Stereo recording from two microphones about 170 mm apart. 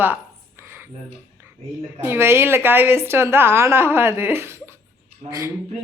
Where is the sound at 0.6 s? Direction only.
15° right (ahead or behind).